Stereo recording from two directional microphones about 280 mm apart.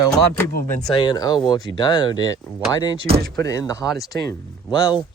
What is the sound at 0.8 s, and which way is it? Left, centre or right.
Speech, centre.